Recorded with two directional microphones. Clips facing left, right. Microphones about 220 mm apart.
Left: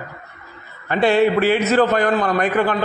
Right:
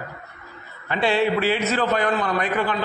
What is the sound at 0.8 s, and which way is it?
A man's voice, 50° left (ahead or behind).